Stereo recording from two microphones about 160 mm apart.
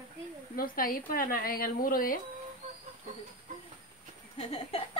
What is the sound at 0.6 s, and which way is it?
A woman's voice, 60° left (ahead or behind).